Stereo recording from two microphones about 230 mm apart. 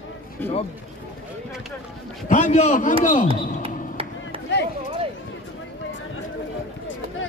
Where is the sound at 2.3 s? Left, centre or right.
Left.